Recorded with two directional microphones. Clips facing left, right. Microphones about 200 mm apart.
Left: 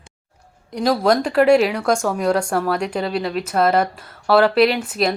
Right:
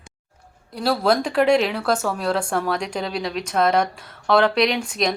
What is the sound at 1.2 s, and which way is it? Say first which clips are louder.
A woman's voice: left 4 dB; 5° left (ahead or behind).